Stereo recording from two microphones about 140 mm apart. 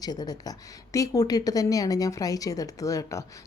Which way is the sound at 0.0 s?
30° left (ahead or behind).